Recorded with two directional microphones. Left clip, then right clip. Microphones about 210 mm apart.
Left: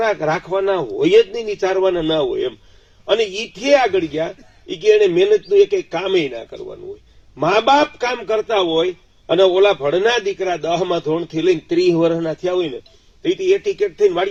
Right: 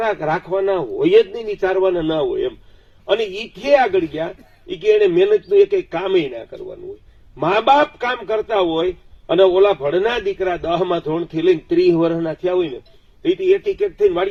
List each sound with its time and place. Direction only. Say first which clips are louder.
0.0 s a man's voice: left 1 dB; 45° left (ahead or behind)
7.3 s a man's voice: even; 45° left (ahead or behind)